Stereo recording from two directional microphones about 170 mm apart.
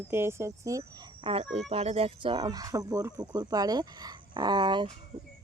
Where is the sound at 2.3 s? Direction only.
20° right (ahead or behind).